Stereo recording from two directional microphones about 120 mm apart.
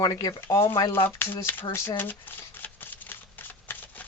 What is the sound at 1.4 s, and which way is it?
Shuffling cards, 20° left (ahead or behind).